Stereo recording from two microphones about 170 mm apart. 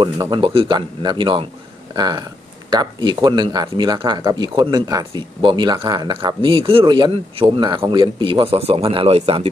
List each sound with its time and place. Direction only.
0.0 s speech: 25° right (ahead or behind)